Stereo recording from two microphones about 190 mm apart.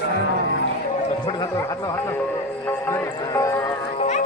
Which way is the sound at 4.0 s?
35° left (ahead or behind).